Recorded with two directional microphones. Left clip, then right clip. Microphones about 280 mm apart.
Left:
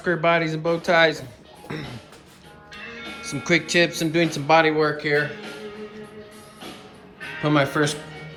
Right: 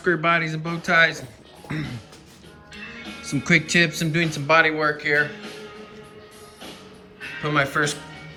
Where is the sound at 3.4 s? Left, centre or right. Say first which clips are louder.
Right 1 dB; centre.